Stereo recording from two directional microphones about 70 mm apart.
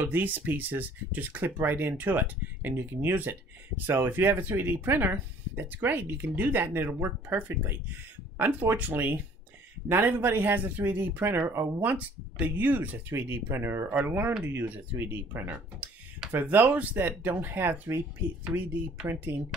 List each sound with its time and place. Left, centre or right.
0.0 s speech: right
19.0 s speech: right